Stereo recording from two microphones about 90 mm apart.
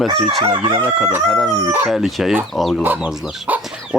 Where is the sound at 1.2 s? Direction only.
5° left (ahead or behind).